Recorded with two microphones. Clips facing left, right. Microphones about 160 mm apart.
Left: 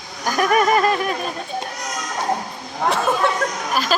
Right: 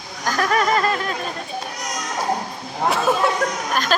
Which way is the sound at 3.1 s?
Centre (ahead or behind).